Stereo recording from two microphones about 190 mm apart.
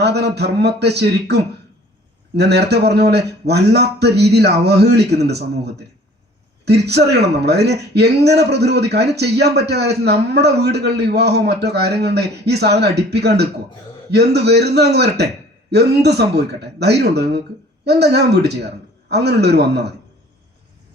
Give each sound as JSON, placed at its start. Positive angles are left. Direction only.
{"t": 0.0, "sound": "a man's voice", "side_deg": -60}